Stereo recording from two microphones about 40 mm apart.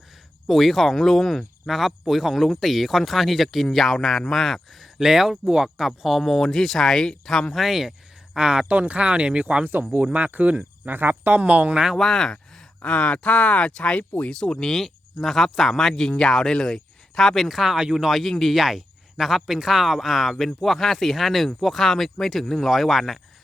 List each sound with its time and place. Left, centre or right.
0.4 s speech: centre
1.6 s speech: centre
4.9 s speech: centre
7.5 s speech: centre
8.4 s speech: right
8.8 s speech: right
10.1 s speech: right
10.6 s speech: right
11.3 s speech: right
11.9 s speech: centre
12.8 s speech: left; by 17.6 s centre
17.7 s speech: centre
18.1 s speech: centre
18.5 s speech: centre